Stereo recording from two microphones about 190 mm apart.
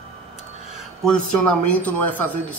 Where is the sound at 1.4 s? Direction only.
5° left (ahead or behind).